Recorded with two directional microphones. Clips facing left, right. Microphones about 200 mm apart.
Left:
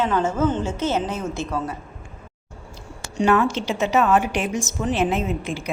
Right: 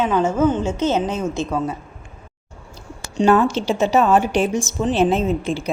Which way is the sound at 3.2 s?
30° right (ahead or behind).